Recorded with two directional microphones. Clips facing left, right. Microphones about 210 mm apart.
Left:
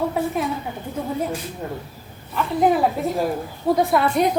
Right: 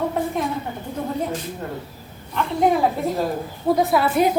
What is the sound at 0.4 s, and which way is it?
Speech, 5° left (ahead or behind).